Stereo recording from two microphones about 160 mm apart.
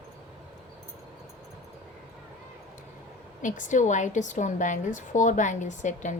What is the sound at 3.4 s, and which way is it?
A woman's voice, 55° left (ahead or behind).